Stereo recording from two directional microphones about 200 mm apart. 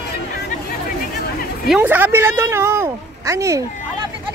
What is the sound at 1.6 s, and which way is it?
A woman's voice, 10° right (ahead or behind).